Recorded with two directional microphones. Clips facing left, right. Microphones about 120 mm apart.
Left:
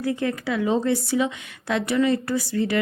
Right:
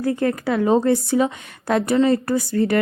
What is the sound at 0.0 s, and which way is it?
A woman's voice, 45° right (ahead or behind).